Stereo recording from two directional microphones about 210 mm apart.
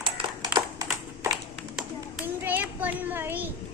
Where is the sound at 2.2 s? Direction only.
10° right (ahead or behind).